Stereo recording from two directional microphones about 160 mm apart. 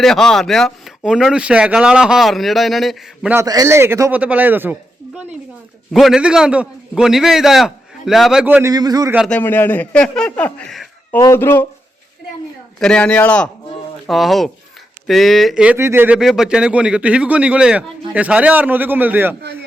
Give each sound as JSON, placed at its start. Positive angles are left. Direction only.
{"t": 0.0, "sound": "speech", "side_deg": 5}
{"t": 3.3, "sound": "speech", "side_deg": -20}
{"t": 8.6, "sound": "a man's voice", "side_deg": -25}
{"t": 9.3, "sound": "a man's voice", "side_deg": 10}
{"t": 11.1, "sound": "a man's voice", "side_deg": 15}
{"t": 12.8, "sound": "a man's voice", "side_deg": 5}